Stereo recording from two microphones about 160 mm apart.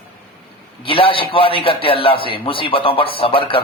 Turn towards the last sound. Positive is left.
turn(degrees=35)  # may be behind; listen again after turning